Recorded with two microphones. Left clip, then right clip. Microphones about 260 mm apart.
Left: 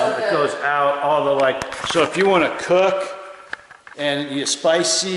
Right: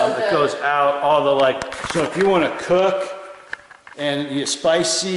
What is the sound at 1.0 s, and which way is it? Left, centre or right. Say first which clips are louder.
A man's voice: right 1 dB; centre.